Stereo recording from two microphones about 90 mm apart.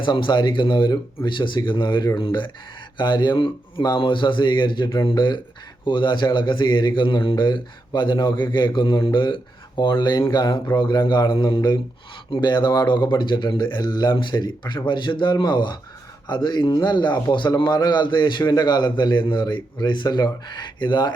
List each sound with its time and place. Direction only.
0.0 s a man's voice: 60° left (ahead or behind)